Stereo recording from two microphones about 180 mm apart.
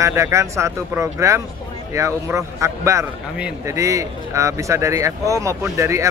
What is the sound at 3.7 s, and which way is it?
Speech, 15° right (ahead or behind).